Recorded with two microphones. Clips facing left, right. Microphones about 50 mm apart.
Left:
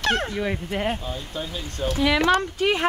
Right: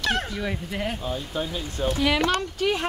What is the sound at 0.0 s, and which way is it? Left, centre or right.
Speech, left.